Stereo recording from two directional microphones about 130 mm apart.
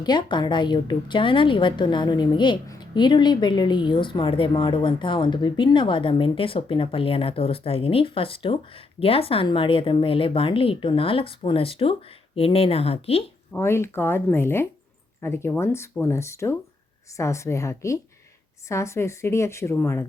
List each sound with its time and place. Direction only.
0.0 s a woman's voice: 35° left (ahead or behind)
13.5 s speech: 20° left (ahead or behind)